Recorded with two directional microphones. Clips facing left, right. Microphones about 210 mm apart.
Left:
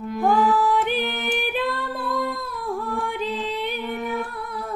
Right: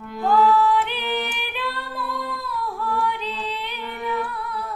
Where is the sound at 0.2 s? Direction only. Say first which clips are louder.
Right 2 dB; 50° left (ahead or behind).